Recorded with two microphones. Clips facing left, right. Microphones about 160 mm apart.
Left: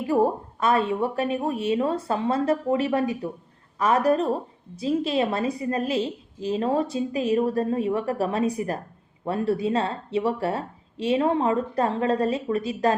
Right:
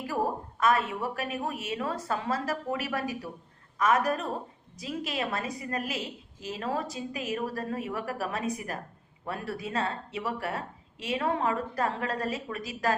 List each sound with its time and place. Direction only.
0.1 s a woman's voice: 30° left (ahead or behind)